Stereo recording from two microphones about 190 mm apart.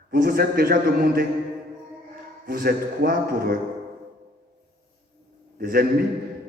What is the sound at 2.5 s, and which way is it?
A man's voice, 50° right (ahead or behind).